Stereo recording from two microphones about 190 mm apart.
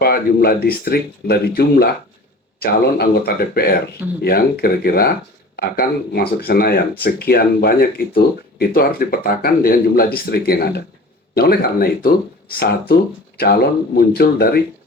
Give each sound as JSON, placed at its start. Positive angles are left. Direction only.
{"t": 0.0, "sound": "speech", "side_deg": 55}